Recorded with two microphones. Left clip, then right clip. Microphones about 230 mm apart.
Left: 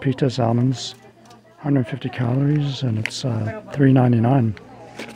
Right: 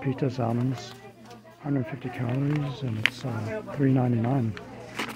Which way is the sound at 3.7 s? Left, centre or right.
Left.